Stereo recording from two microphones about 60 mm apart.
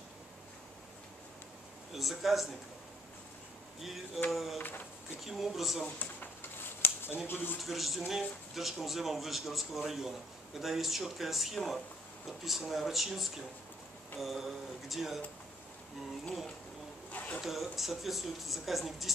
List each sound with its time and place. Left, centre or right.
2.0 s speech: centre
3.8 s speech: centre
4.6 s speech: left
5.2 s speech: centre
6.8 s a sound: left
7.2 s speech: left
7.6 s speech: centre
17.1 s a sound: left
17.4 s speech: centre